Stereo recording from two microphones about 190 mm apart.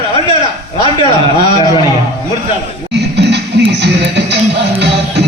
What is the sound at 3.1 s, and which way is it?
Music, 65° right (ahead or behind).